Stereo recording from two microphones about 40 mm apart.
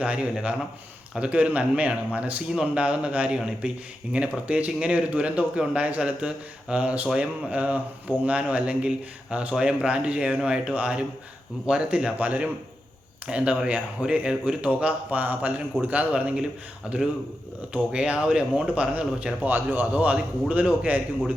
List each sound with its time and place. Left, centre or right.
0.0 s speech: right
3.2 s speech: right
4.1 s speech: right
12.2 s speech: right
14.7 s a man's voice: right
16.9 s speech: right
19.4 s a man's voice: right
19.8 s speech: right